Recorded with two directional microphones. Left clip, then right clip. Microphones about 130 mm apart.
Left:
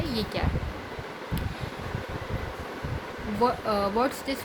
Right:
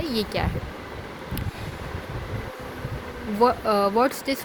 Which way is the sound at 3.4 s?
60° right (ahead or behind).